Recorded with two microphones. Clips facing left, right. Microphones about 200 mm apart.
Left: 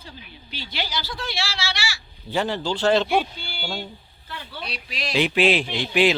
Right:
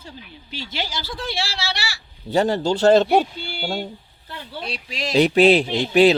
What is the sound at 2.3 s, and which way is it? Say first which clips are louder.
A man's voice: right 6 dB; 40° right (ahead or behind).